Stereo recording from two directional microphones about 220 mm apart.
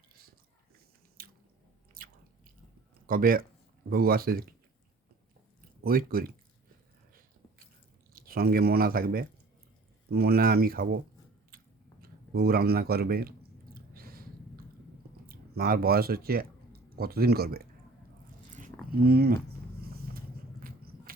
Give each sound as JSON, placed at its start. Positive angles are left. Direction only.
{"t": 2.0, "sound": "chewing", "side_deg": -40}
{"t": 3.1, "sound": "speech", "side_deg": -40}
{"t": 5.8, "sound": "speech", "side_deg": -40}
{"t": 8.1, "sound": "speech", "side_deg": -40}
{"t": 11.5, "sound": "biting", "side_deg": -40}
{"t": 12.0, "sound": "a man's voice", "side_deg": -45}
{"t": 13.7, "sound": "a sound", "side_deg": -45}
{"t": 15.3, "sound": "speech", "side_deg": -40}
{"t": 18.5, "sound": "biting", "side_deg": -40}
{"t": 19.8, "sound": "vehicle", "side_deg": -45}
{"t": 20.6, "sound": "biting", "side_deg": -40}